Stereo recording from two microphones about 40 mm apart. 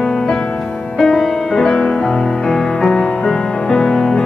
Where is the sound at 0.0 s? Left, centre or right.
Centre.